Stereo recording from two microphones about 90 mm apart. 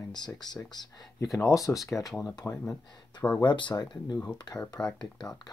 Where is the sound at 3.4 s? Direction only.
60° left (ahead or behind).